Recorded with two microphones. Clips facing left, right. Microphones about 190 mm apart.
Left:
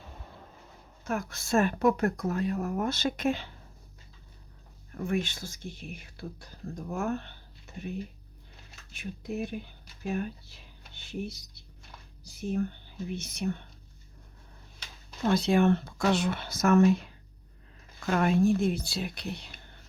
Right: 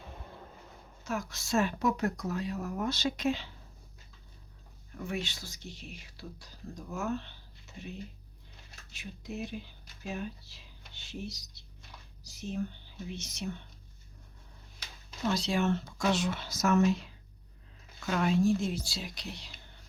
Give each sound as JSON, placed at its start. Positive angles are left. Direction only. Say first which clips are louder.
{"t": 1.0, "sound": "speech", "louder": "left 3 dB", "side_deg": 55}
{"t": 4.9, "sound": "speech", "louder": "left 6 dB", "side_deg": 50}
{"t": 15.3, "sound": "speech", "louder": "left 6 dB", "side_deg": 55}